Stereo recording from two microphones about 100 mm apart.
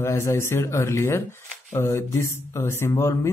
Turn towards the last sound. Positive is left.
turn(degrees=30)  # may be behind; listen again after turning